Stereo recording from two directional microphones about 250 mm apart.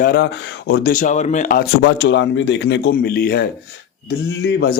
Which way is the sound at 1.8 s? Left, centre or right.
Left.